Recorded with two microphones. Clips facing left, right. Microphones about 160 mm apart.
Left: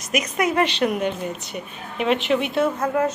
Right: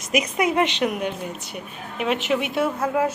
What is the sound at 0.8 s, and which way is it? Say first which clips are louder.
A woman's voice: left 2 dB; 5° right (ahead or behind).